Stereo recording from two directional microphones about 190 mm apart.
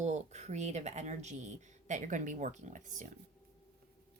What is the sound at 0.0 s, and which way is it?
Speech, 35° right (ahead or behind).